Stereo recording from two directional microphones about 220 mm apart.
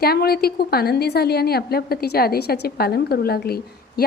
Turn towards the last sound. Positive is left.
turn(degrees=45)  # may be behind; listen again after turning